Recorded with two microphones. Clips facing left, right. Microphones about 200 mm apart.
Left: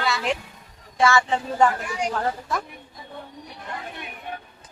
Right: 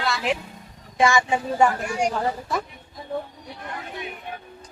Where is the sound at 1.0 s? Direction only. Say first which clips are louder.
Even; 15° right (ahead or behind).